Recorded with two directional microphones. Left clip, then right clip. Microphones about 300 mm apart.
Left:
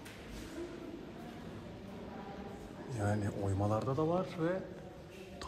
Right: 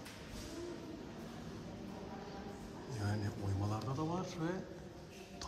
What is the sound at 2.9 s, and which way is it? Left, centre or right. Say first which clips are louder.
A man's voice: left 7 dB; centre.